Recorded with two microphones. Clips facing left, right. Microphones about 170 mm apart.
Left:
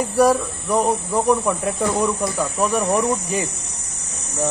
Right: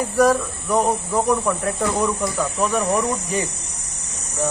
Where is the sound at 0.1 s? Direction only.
10° left (ahead or behind).